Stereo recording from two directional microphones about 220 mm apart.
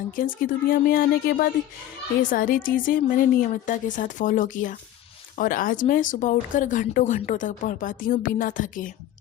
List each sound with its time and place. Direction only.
0.1 s speech: 40° left (ahead or behind)